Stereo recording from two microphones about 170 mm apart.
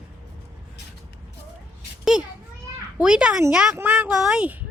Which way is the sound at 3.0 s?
5° right (ahead or behind).